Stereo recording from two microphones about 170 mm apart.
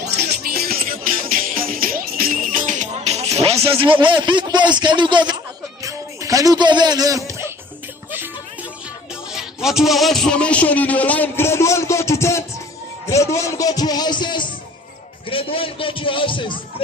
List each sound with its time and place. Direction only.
0.4 s music: 65° right (ahead or behind); by 4.0 s 30° right (ahead or behind)
4.1 s speech: 25° right (ahead or behind)
5.8 s music: 20° right (ahead or behind)
9.3 s a man's voice: 5° right (ahead or behind); by 16.8 s 30° left (ahead or behind)